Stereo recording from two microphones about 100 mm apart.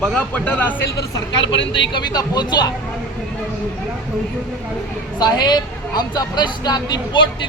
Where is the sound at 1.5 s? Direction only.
50° left (ahead or behind).